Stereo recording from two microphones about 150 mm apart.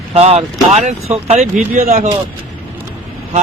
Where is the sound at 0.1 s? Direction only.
45° right (ahead or behind).